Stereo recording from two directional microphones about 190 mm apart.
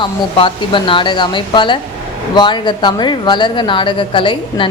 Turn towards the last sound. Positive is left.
turn(degrees=25)  # may be behind; listen again after turning